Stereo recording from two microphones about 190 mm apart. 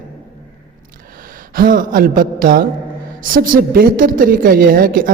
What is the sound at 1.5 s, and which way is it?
A man's voice, 45° right (ahead or behind).